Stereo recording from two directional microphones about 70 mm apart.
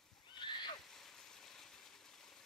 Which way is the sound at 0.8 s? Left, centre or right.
Centre.